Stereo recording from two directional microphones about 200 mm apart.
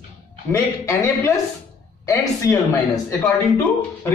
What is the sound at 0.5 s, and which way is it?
Speech, 15° left (ahead or behind).